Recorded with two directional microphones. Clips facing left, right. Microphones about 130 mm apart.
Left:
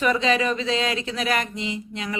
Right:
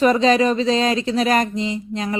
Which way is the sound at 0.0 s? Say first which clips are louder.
Right 6 dB; 35° right (ahead or behind).